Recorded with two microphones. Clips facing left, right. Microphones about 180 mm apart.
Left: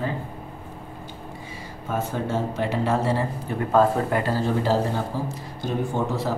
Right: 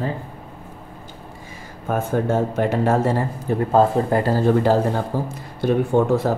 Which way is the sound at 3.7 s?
35° right (ahead or behind).